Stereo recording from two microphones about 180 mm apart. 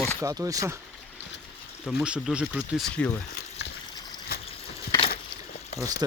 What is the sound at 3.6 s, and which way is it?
Water, 70° left (ahead or behind).